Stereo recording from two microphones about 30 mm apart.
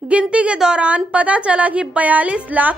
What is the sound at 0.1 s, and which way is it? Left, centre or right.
A woman's voice, right.